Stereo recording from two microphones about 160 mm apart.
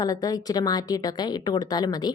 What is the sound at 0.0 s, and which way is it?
Speech, 25° left (ahead or behind).